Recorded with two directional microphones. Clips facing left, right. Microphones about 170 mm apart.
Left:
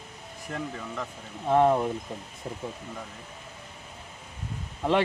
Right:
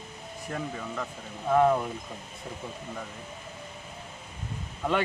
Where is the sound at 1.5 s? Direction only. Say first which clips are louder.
Left 1 dB; 25° left (ahead or behind).